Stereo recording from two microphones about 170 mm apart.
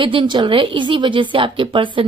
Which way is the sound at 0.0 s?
30° right (ahead or behind).